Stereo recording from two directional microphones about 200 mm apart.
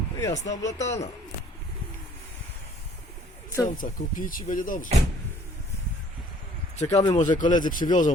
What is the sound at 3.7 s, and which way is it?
Speech, 40° left (ahead or behind).